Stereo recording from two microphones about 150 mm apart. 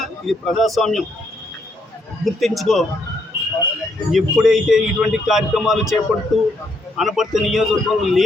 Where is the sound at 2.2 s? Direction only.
Centre (ahead or behind).